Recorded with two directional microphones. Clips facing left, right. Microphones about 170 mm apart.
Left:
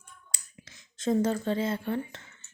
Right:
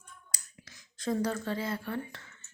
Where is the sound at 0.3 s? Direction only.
25° left (ahead or behind).